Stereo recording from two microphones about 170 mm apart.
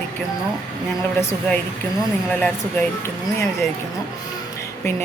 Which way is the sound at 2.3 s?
10° left (ahead or behind).